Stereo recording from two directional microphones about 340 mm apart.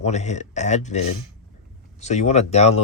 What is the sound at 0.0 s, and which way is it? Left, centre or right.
Speech, centre.